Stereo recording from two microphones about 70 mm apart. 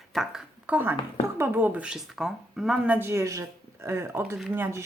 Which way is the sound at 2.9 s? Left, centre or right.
Right.